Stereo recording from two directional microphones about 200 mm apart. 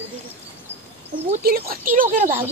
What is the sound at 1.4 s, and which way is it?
Speech, 50° right (ahead or behind).